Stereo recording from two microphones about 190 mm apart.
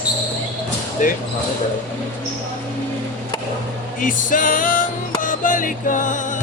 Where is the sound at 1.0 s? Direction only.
45° left (ahead or behind).